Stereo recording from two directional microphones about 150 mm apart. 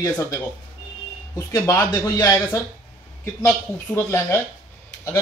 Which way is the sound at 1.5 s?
25° left (ahead or behind).